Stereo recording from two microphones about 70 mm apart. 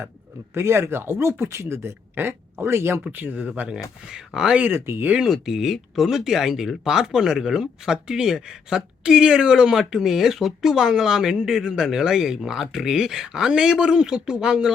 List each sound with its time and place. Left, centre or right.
0.5 s speech: right
3.1 s speech: right
4.4 s speech: centre
4.6 s speech: right
5.1 s speech: centre